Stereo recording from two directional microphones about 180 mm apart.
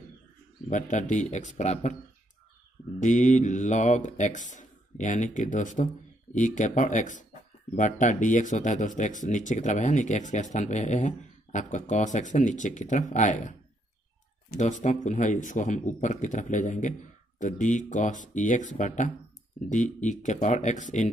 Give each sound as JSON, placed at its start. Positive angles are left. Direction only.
{"t": 0.7, "sound": "speech", "side_deg": 45}
{"t": 3.0, "sound": "speech", "side_deg": 45}